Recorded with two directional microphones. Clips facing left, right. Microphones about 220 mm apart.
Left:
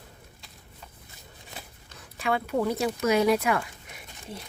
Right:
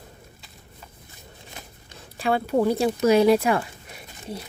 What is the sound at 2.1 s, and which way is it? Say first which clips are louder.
Speech: right 5 dB; 35° right (ahead or behind).